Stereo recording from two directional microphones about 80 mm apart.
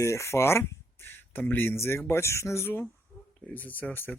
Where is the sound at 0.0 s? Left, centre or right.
Left.